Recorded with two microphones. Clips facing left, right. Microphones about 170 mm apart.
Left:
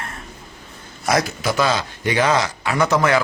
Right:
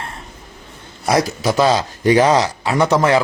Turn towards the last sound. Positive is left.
turn(degrees=-35)  # may be behind; listen again after turning